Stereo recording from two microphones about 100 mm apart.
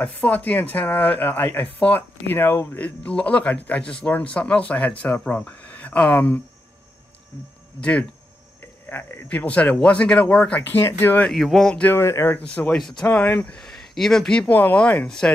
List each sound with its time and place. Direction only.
0.0 s speech: 15° left (ahead or behind)
2.8 s a man's voice: 15° left (ahead or behind)
7.8 s a man's voice: 15° left (ahead or behind)
10.6 s speech: 20° left (ahead or behind)
11.3 s speech: centre (ahead or behind)
11.8 s a man's voice: 25° left (ahead or behind)
12.7 s speech: 5° left (ahead or behind)
13.0 s a man's voice: 15° left (ahead or behind)
13.6 s speech: 5° left (ahead or behind)
14.5 s a man's voice: 15° left (ahead or behind)